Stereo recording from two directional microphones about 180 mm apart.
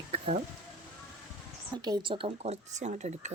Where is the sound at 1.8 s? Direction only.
25° right (ahead or behind); by 3.3 s 40° right (ahead or behind).